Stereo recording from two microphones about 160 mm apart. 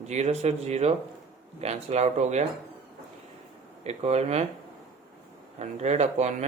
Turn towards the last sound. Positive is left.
turn(degrees=-45)  # may be behind; listen again after turning